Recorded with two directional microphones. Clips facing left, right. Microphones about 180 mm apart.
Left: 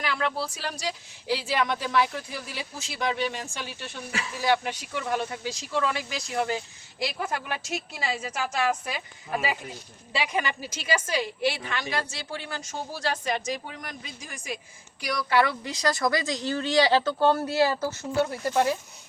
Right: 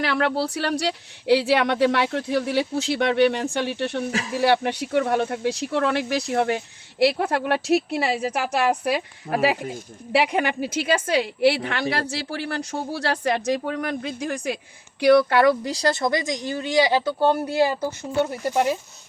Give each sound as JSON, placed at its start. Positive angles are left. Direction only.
{"t": 0.0, "sound": "speech", "side_deg": -70}
{"t": 15.3, "sound": "speech", "side_deg": -50}